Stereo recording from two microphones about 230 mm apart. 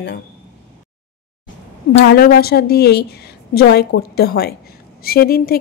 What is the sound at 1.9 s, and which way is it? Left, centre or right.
A woman's voice, left.